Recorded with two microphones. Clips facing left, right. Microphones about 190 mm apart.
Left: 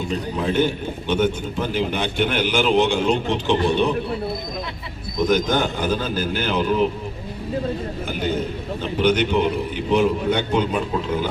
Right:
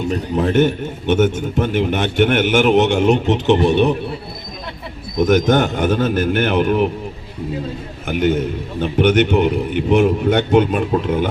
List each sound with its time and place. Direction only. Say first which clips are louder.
0.3 s a man's voice: right 6 dB; 50° right (ahead or behind)
3.5 s a man's voice: right 5 dB; 25° right (ahead or behind)
5.2 s a man's voice: right 5 dB; 50° right (ahead or behind)
5.8 s a man's voice: right 6 dB; 65° right (ahead or behind)
8.0 s a man's voice: right 8 dB; 65° right (ahead or behind)